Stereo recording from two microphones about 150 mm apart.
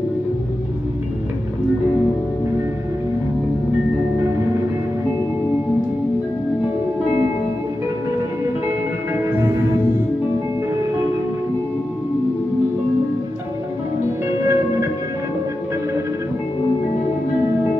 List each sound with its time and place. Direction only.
14.4 s music: 20° right (ahead or behind)